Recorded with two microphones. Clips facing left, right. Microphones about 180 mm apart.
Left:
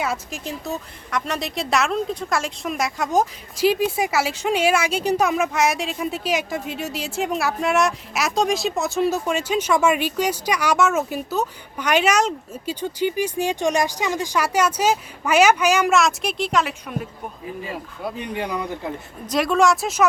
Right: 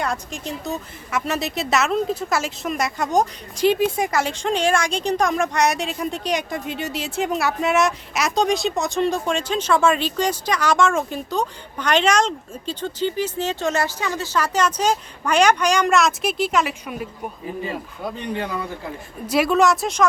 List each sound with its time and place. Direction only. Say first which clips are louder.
0.0 s a woman's voice: even; 5° left (ahead or behind)
18.3 s speech: left 1 dB; 15° left (ahead or behind)
19.3 s a woman's voice: right 1 dB; 5° right (ahead or behind)